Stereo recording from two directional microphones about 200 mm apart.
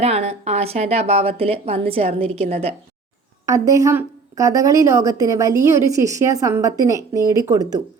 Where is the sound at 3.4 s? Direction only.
15° right (ahead or behind).